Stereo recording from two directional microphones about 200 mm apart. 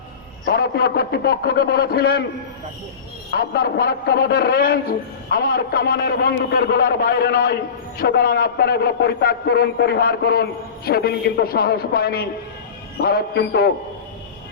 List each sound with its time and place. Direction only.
0.5 s a man's voice: 50° left (ahead or behind)
3.3 s a man's voice: 55° left (ahead or behind)